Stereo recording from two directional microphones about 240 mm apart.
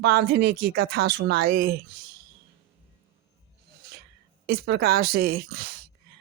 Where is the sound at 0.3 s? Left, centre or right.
Right.